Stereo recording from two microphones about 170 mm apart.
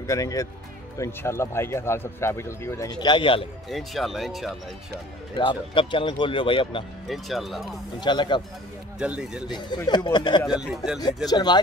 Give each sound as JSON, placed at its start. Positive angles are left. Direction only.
{"t": 0.0, "sound": "speech", "side_deg": 20}
{"t": 3.7, "sound": "speech", "side_deg": 0}
{"t": 5.3, "sound": "speech", "side_deg": 30}
{"t": 7.1, "sound": "speech", "side_deg": 0}
{"t": 8.0, "sound": "speech", "side_deg": 25}
{"t": 9.0, "sound": "speech", "side_deg": -5}
{"t": 9.6, "sound": "speech", "side_deg": 25}
{"t": 10.7, "sound": "speech", "side_deg": 0}
{"t": 11.2, "sound": "speech", "side_deg": 25}